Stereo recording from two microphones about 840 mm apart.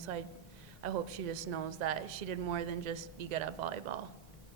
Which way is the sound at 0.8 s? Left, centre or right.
Right.